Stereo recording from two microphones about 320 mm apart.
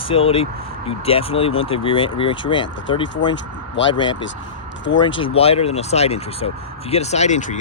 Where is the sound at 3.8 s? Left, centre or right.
Left.